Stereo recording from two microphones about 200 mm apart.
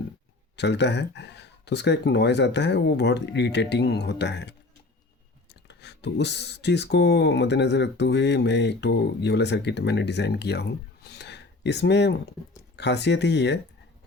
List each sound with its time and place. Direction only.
0.5 s speech: 60° left (ahead or behind)
5.6 s speech: 60° left (ahead or behind)